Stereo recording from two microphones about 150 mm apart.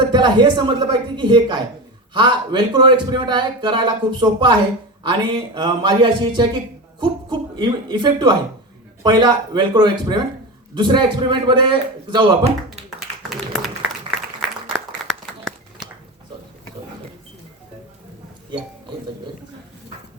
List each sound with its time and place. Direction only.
0.0 s a man's voice: 30° right (ahead or behind)
15.0 s crumpling: centre (ahead or behind)